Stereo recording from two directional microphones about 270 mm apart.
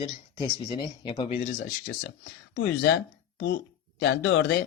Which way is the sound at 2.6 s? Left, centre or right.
Left.